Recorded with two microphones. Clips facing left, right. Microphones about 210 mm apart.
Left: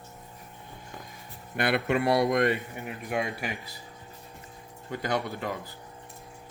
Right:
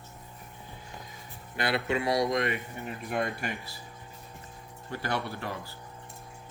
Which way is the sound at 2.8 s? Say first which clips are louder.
Even; 10° left (ahead or behind).